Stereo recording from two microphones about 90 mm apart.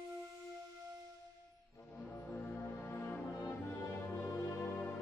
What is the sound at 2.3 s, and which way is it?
Music, 10° left (ahead or behind).